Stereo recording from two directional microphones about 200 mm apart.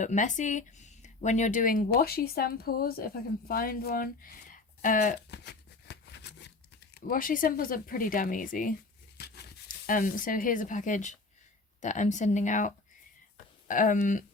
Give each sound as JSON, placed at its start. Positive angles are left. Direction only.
{"t": 0.0, "sound": "speech", "side_deg": 35}
{"t": 5.3, "sound": "crumpling", "side_deg": 55}
{"t": 9.1, "sound": "tearing", "side_deg": 55}
{"t": 9.8, "sound": "speech", "side_deg": 45}